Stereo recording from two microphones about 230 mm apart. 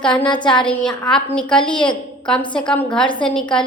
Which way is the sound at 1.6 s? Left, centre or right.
Left.